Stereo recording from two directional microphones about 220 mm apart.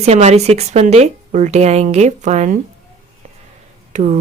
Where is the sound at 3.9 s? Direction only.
35° right (ahead or behind).